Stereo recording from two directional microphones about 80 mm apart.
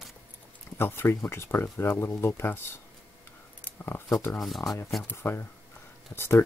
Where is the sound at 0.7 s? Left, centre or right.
Left.